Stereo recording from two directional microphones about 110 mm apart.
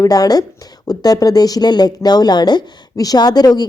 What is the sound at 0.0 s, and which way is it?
Speech, 35° left (ahead or behind).